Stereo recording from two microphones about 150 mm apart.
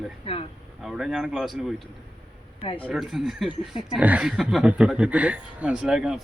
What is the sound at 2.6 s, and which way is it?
Speech, 40° left (ahead or behind).